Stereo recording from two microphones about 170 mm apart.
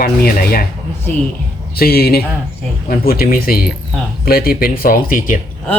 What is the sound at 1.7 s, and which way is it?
Speech, 65° left (ahead or behind).